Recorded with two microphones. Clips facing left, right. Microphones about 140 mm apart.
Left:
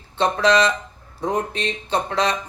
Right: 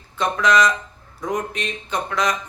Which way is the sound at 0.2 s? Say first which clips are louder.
Left 1 dB; 30° left (ahead or behind).